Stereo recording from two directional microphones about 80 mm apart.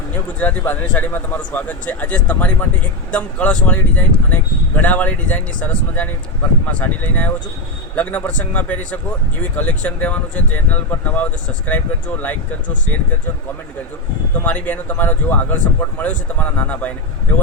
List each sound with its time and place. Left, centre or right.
0.3 s speech: centre
14.3 s speech: centre